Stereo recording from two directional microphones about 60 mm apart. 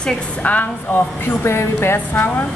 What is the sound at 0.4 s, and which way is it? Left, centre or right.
Speech, left.